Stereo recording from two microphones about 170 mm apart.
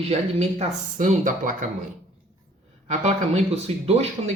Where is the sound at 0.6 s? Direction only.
45° right (ahead or behind).